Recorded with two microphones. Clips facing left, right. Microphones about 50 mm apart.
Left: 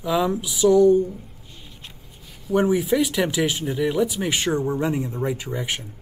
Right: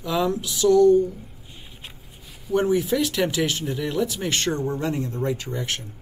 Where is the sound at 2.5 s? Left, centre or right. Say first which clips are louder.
Left 1 dB; centre.